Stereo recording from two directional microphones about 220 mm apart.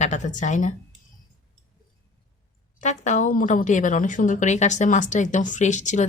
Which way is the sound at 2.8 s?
35° left (ahead or behind).